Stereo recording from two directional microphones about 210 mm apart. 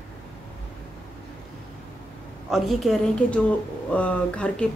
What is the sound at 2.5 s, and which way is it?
A woman's voice, centre (ahead or behind).